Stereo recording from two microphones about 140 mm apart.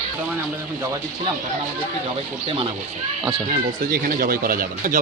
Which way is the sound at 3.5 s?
90° right.